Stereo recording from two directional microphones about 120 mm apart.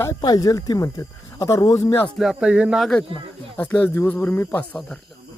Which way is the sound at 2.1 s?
Centre (ahead or behind).